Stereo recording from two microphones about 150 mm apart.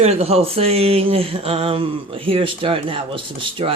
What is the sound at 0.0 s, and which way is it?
Speech, 45° right (ahead or behind).